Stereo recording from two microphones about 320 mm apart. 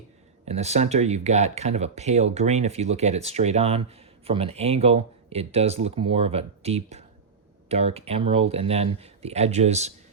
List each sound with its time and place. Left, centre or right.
0.4 s speech: centre